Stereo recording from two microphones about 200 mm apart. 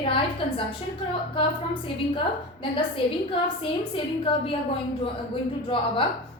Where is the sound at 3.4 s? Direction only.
25° left (ahead or behind).